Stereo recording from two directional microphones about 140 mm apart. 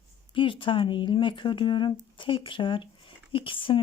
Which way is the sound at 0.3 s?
40° left (ahead or behind).